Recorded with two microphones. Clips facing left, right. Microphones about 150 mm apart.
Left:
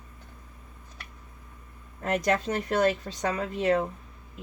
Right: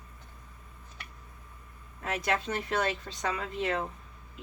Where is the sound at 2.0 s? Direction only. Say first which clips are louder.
Left 5 dB; 45° left (ahead or behind).